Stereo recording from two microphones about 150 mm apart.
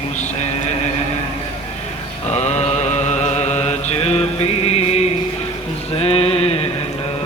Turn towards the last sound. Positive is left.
turn(degrees=40)  # may be behind; listen again after turning